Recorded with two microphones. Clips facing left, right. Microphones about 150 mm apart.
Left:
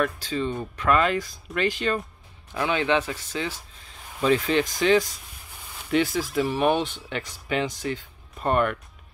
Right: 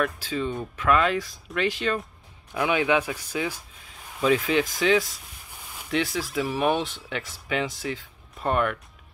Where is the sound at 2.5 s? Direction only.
10° right (ahead or behind).